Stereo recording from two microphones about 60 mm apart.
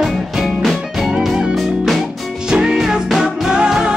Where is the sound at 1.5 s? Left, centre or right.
Centre.